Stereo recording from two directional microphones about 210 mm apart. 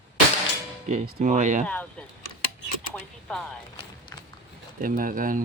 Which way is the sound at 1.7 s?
5° left (ahead or behind).